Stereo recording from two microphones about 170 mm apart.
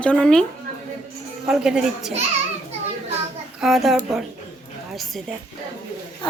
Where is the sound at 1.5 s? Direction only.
5° right (ahead or behind).